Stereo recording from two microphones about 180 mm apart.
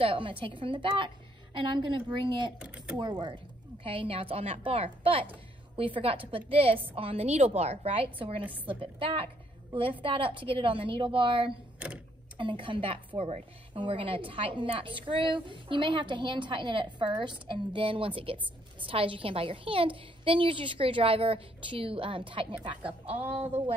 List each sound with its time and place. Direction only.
0.0 s a woman's voice: 30° right (ahead or behind)
2.6 s speech: 5° right (ahead or behind)
3.0 s a woman's voice: 25° right (ahead or behind)
11.8 s speech: 5° right (ahead or behind)
12.4 s a woman's voice: 30° right (ahead or behind)